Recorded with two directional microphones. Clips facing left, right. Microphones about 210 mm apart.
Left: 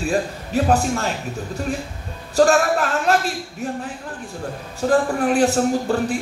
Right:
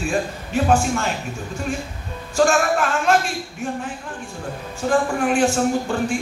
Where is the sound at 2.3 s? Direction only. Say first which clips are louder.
Left 2 dB; 35° left (ahead or behind).